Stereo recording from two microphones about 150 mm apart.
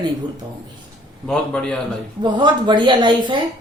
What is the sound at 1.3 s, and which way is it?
Speech, 5° left (ahead or behind).